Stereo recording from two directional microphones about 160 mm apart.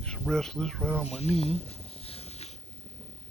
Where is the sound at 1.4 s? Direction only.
40° left (ahead or behind).